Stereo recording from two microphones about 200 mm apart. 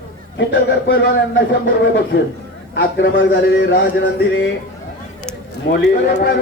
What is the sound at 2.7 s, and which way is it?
A man's voice, 60° left (ahead or behind).